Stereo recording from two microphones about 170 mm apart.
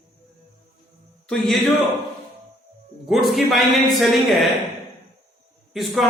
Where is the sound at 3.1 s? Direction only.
Centre (ahead or behind).